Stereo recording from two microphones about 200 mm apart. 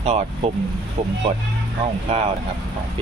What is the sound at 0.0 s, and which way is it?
Speech, 35° right (ahead or behind).